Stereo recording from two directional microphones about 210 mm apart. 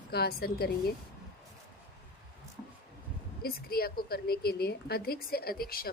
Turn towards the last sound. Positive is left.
turn(degrees=45)  # may be behind; listen again after turning